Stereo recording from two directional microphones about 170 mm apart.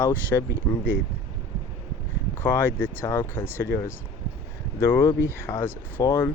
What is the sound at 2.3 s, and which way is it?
Speech, 10° left (ahead or behind).